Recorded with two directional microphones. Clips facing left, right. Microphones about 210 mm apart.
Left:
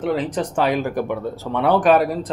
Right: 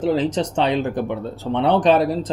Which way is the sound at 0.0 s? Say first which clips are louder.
Right 2 dB; 30° right (ahead or behind).